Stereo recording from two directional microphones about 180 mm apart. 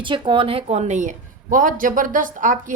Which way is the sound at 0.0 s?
25° right (ahead or behind).